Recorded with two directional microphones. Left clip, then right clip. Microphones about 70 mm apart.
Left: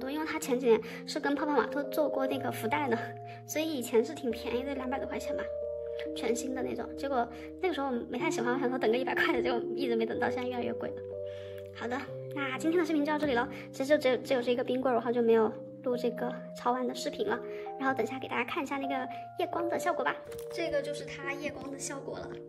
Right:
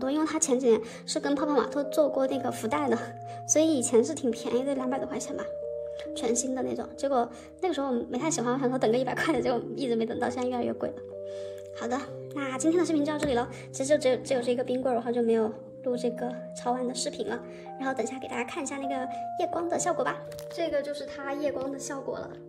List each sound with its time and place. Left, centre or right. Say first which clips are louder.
0.0 s a sound: right 6 dB; right
0.6 s a woman's voice: even; centre
3.5 s a woman's voice: right 6 dB; right
6.5 s a woman's voice: right 3 dB; right
11.8 s a woman's voice: right 4 dB; centre
13.7 s a woman's voice: right 2 dB; centre; by 21.5 s right